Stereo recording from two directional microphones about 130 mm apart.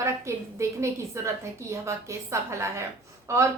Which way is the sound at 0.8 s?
20° right (ahead or behind).